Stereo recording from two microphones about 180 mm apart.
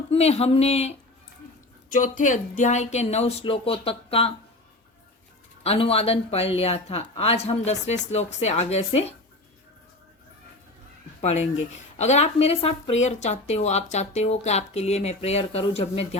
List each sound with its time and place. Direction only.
0.1 s speech: 35° left (ahead or behind)
5.6 s speech: 35° left (ahead or behind)
11.2 s speech: 40° left (ahead or behind)